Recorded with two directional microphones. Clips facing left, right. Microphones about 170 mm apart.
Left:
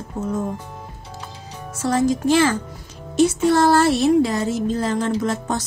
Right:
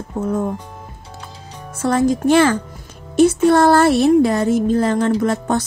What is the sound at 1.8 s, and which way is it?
A woman's voice, 55° right (ahead or behind).